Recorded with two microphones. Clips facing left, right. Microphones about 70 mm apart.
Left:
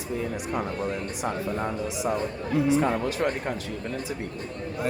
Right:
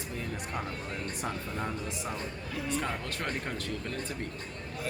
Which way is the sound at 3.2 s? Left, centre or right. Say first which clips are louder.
Left 6 dB; centre.